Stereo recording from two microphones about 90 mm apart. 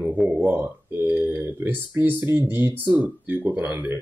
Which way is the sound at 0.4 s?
25° right (ahead or behind).